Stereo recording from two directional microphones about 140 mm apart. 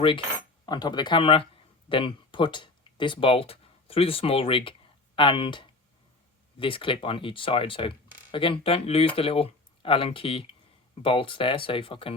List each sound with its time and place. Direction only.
0.6 s speech: 30° left (ahead or behind)